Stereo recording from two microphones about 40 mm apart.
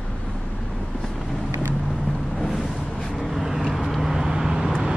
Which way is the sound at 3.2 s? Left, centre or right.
Centre.